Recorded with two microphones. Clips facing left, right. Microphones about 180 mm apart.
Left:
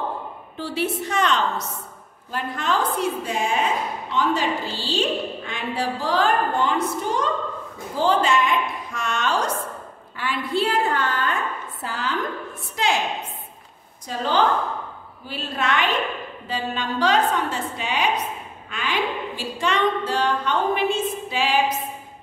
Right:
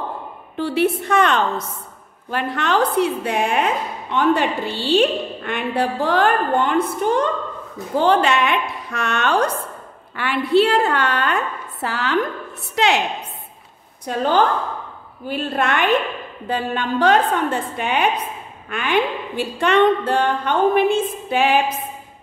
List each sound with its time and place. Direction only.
0.6 s a woman's voice: 60° right (ahead or behind)
2.3 s a woman's voice: 70° right (ahead or behind)
14.0 s a woman's voice: 50° right (ahead or behind)